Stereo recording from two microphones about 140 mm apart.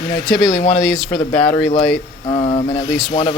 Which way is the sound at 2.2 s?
35° left (ahead or behind).